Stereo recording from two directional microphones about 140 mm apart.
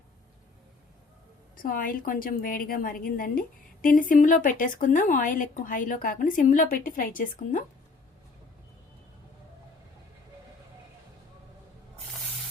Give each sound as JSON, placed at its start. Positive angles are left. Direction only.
{"t": 1.5, "sound": "a woman's voice", "side_deg": 80}